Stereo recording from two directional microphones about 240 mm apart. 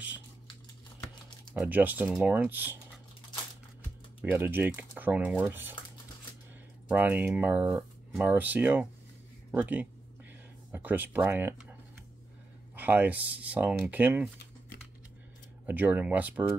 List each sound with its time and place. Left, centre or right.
1.5 s speech: centre
4.2 s speech: centre
6.9 s speech: centre
12.7 s speech: centre
15.6 s speech: centre